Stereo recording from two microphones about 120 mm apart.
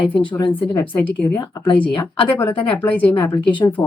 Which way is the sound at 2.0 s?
15° left (ahead or behind).